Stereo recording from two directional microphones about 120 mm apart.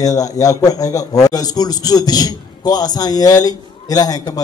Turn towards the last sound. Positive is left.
turn(degrees=30)  # may be behind; listen again after turning